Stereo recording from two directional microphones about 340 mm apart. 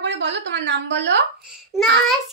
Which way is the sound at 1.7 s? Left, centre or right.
Centre.